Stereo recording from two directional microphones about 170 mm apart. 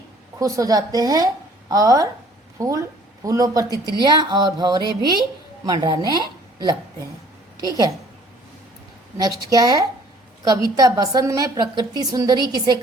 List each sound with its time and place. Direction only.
0.3 s a woman's voice: 20° right (ahead or behind)
3.7 s a woman's voice: 20° left (ahead or behind)
4.0 s a woman's voice: 25° right (ahead or behind)
9.1 s a woman's voice: 20° right (ahead or behind)